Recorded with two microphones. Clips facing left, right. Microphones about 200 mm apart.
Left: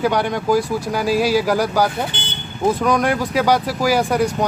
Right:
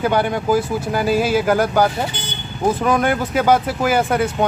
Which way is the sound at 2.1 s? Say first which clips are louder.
Right 1 dB; 25° left (ahead or behind).